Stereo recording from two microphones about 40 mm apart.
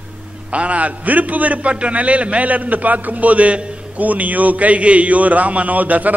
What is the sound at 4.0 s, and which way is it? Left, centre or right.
A man's voice, right.